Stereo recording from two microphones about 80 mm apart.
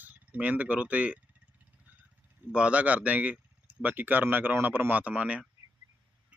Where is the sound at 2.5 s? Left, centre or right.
Centre.